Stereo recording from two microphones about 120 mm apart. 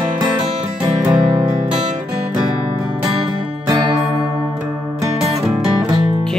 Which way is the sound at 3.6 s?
40° right (ahead or behind).